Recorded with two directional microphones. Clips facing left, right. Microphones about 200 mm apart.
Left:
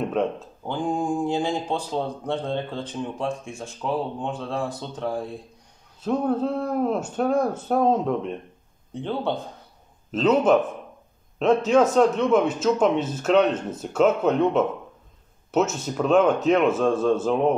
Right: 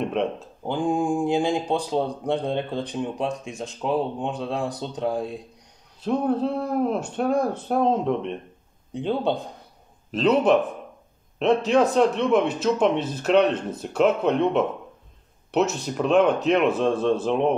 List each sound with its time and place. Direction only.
0.7 s speech: 15° right (ahead or behind)
5.9 s speech: centre (ahead or behind)
8.9 s speech: 15° right (ahead or behind)
10.1 s a man's voice: centre (ahead or behind)